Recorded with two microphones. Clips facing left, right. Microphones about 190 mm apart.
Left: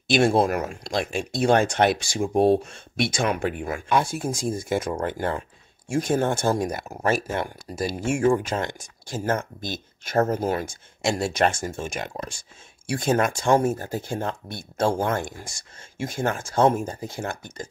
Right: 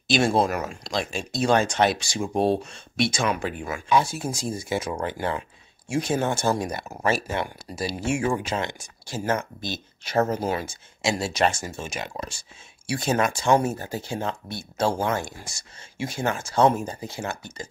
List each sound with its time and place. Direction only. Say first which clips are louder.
0.1 s speech: left 2 dB; 55° left (ahead or behind)